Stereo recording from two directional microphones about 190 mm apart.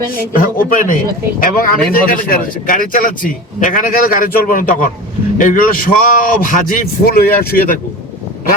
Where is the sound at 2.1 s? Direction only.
45° left (ahead or behind).